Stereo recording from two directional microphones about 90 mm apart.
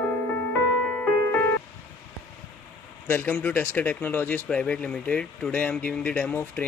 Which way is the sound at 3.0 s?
25° left (ahead or behind).